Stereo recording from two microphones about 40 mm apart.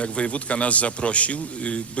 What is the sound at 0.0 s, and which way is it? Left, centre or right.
A man's voice, left.